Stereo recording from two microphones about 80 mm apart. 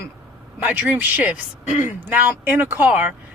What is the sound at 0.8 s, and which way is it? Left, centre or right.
Speech, centre.